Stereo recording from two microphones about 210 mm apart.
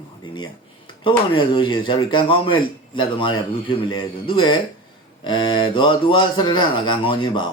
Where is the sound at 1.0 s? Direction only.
25° left (ahead or behind).